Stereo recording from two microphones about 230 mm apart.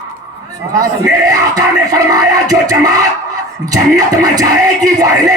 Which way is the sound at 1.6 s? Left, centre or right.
Centre.